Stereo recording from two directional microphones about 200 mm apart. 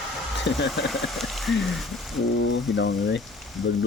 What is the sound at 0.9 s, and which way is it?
Speech, centre (ahead or behind).